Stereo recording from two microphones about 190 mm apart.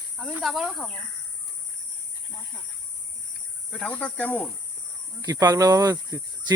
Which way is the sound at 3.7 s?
5° left (ahead or behind).